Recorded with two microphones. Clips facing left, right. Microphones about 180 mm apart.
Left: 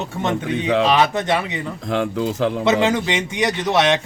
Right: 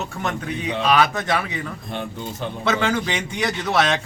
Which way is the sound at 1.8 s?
90° left.